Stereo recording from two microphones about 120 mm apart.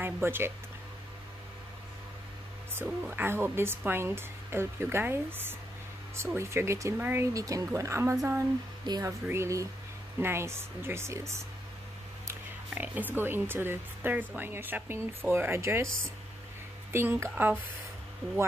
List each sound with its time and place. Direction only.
0.0 s a sound: 20° right (ahead or behind)
2.7 s speech: 20° right (ahead or behind)
12.7 s speech: 15° right (ahead or behind)
16.9 s speech: 20° right (ahead or behind)